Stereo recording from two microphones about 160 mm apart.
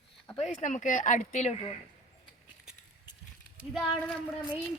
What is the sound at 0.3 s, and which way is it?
Speech, 45° left (ahead or behind).